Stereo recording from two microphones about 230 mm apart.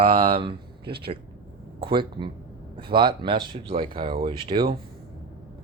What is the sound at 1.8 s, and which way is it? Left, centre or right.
Speech, right.